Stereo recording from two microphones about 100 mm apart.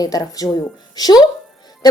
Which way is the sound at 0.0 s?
40° left (ahead or behind).